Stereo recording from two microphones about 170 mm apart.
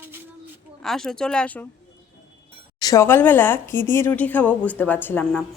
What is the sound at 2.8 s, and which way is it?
Speech, 15° left (ahead or behind).